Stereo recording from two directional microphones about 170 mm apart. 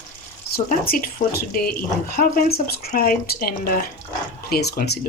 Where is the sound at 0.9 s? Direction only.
60° left (ahead or behind).